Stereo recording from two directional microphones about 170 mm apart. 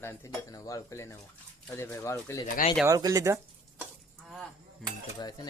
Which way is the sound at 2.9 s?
20° right (ahead or behind).